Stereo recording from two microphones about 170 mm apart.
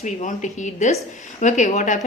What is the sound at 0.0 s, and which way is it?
A woman's voice, 45° left (ahead or behind).